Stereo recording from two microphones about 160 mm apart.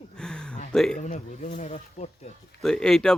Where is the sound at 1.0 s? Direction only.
45° left (ahead or behind).